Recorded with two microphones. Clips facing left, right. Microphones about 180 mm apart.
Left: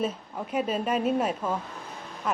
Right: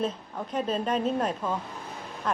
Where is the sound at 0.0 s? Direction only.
10° left (ahead or behind).